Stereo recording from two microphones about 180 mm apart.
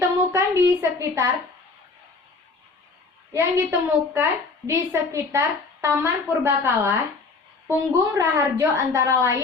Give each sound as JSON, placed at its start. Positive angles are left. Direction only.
{"t": 0.3, "sound": "a woman's voice", "side_deg": -15}
{"t": 3.3, "sound": "a woman's voice", "side_deg": -15}